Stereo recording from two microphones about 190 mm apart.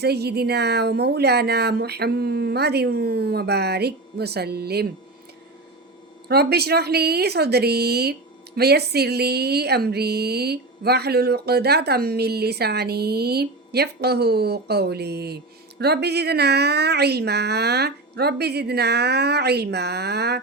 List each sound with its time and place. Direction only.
0.0 s speech: 60° right (ahead or behind)
6.2 s speech: 60° right (ahead or behind)